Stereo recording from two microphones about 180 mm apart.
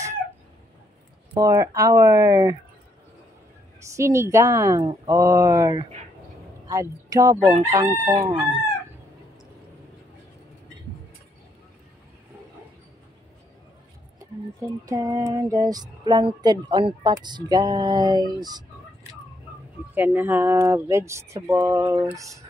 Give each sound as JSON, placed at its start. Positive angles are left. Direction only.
{"t": 1.3, "sound": "speech", "side_deg": -20}
{"t": 3.9, "sound": "speech", "side_deg": -15}
{"t": 14.9, "sound": "speech", "side_deg": -15}
{"t": 19.9, "sound": "speech", "side_deg": -10}